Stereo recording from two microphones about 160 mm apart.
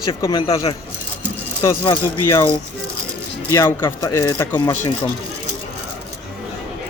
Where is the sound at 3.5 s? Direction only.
15° left (ahead or behind).